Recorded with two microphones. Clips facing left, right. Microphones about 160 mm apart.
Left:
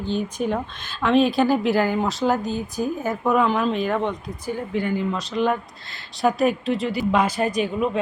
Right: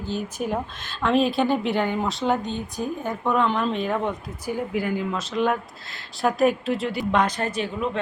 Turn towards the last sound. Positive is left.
turn(degrees=10)  # may be behind; listen again after turning